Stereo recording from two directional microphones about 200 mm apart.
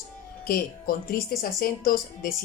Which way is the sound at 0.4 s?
45° left (ahead or behind).